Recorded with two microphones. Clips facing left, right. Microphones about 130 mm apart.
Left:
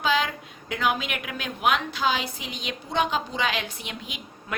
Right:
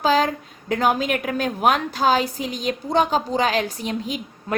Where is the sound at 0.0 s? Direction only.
40° right (ahead or behind).